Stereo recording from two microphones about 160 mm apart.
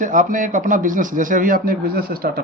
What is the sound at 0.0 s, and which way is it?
Speech, 55° right (ahead or behind).